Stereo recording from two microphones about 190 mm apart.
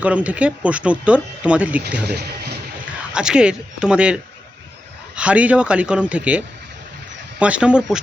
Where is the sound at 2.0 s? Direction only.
60° right (ahead or behind).